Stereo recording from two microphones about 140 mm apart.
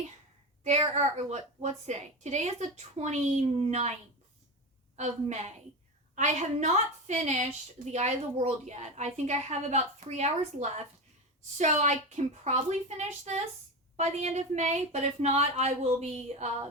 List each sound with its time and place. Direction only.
0.8 s a woman's voice: 50° right (ahead or behind)
4.9 s a woman's voice: 50° right (ahead or behind)
13.9 s a woman's voice: 50° right (ahead or behind)